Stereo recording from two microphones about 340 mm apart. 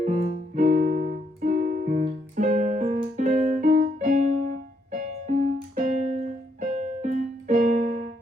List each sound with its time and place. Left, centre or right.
0.0 s music: right